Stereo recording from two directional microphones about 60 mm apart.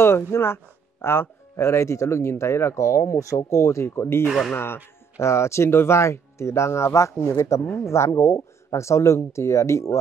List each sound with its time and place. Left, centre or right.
0.0 s speech: left
5.2 s speech: left